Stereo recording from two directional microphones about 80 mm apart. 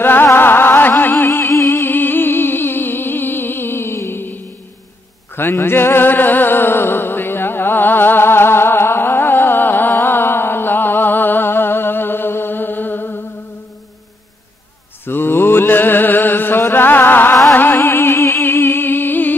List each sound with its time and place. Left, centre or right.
0.0 s music: left
15.0 s mantra: left
17.5 s music: left